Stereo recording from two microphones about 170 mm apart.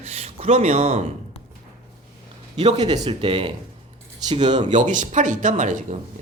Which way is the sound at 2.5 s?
40° right (ahead or behind).